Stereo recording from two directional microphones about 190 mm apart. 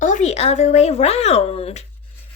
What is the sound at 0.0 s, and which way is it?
Speech, 40° left (ahead or behind).